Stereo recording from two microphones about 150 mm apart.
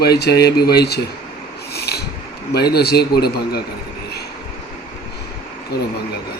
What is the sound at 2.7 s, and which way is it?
Speech, 90° left.